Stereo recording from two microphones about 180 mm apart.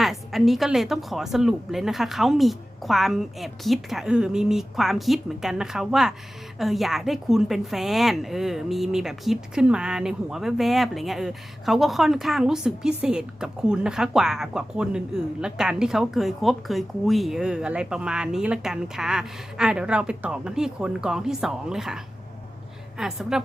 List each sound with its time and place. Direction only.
0.0 s a woman's voice: centre (ahead or behind)